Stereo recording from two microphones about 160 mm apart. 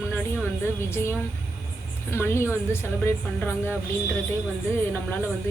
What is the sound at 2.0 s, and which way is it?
Speech, 15° left (ahead or behind).